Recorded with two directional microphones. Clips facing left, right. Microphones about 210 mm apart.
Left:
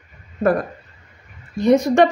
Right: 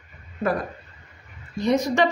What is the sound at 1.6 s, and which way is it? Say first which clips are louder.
Speech: left 7 dB; 55° left (ahead or behind).